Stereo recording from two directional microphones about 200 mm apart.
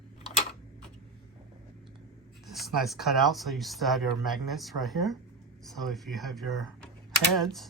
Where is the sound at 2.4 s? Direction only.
Centre (ahead or behind).